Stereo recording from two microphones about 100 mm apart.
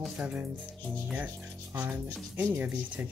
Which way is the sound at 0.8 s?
10° left (ahead or behind).